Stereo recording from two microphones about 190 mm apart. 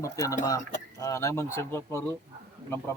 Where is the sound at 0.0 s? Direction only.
15° left (ahead or behind).